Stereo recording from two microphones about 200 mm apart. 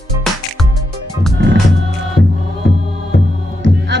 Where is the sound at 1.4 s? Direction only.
55° right (ahead or behind).